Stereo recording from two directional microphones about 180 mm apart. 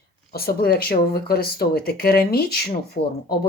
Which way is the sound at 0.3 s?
55° left (ahead or behind).